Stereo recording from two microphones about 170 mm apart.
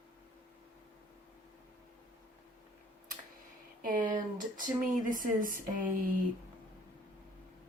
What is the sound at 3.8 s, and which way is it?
A woman's voice, 50° right (ahead or behind).